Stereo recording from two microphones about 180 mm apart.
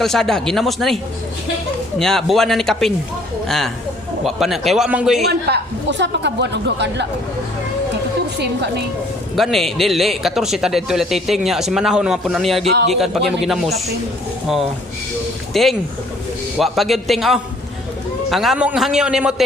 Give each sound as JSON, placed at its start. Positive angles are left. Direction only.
{"t": 0.0, "sound": "speech", "side_deg": 0}
{"t": 2.0, "sound": "speech", "side_deg": 0}
{"t": 4.2, "sound": "speech", "side_deg": 0}
{"t": 5.3, "sound": "speech", "side_deg": -70}
{"t": 8.4, "sound": "speech", "side_deg": -65}
{"t": 9.3, "sound": "speech", "side_deg": 0}
{"t": 15.5, "sound": "speech", "side_deg": 0}